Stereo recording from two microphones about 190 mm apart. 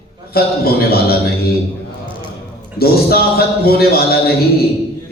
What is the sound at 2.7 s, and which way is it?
A man's voice, 55° left (ahead or behind).